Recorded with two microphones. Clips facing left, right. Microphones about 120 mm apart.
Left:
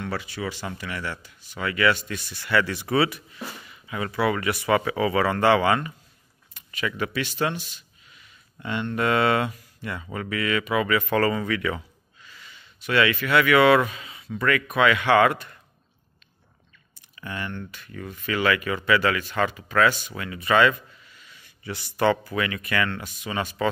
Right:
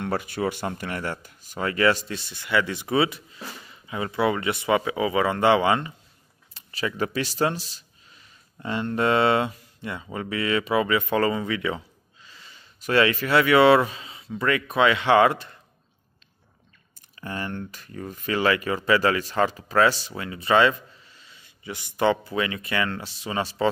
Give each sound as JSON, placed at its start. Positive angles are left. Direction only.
{"t": 0.0, "sound": "speech", "side_deg": -50}
{"t": 17.1, "sound": "speech", "side_deg": -35}